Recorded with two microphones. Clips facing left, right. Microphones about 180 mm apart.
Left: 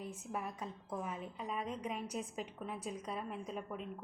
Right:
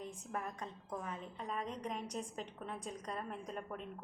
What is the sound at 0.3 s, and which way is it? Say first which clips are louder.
A woman's voice: left 1 dB; 5° left (ahead or behind).